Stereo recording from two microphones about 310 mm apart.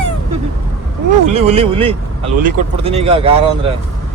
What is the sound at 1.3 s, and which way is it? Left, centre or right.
Speech, centre.